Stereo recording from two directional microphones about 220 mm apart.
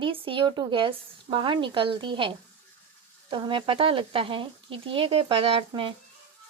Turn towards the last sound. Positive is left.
turn(degrees=-25)  # may be behind; listen again after turning